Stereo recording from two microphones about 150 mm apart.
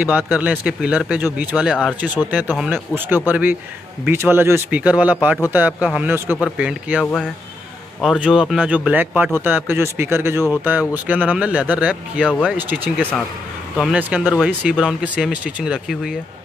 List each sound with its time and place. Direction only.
0.0 s speech: 10° right (ahead or behind)